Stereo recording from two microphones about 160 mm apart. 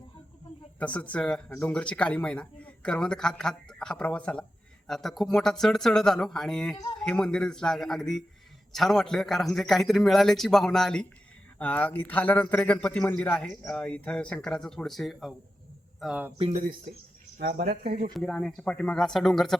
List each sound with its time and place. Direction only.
0.8 s a man's voice: 10° left (ahead or behind)
16.5 s speech: 55° right (ahead or behind)
18.2 s a man's voice: 5° left (ahead or behind)